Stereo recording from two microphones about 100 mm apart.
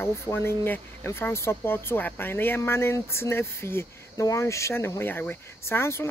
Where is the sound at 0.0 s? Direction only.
25° left (ahead or behind).